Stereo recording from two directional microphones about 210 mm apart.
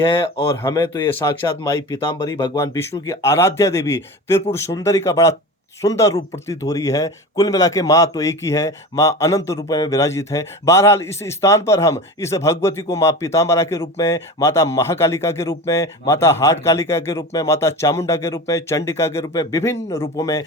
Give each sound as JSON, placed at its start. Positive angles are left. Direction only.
{"t": 0.3, "sound": "a man's voice", "side_deg": 15}